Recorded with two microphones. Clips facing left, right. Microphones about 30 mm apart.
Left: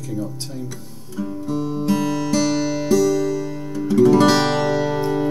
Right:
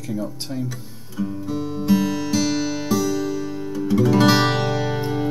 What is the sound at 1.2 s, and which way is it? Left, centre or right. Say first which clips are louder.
Music: left 1 dB; centre.